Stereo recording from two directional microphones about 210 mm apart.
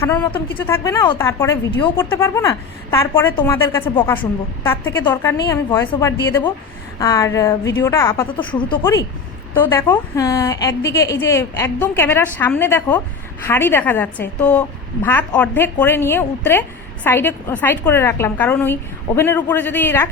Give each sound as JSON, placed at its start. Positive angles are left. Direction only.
{"t": 0.0, "sound": "a woman's voice", "side_deg": 15}
{"t": 8.4, "sound": "speech", "side_deg": 25}
{"t": 9.6, "sound": "a woman's voice", "side_deg": 10}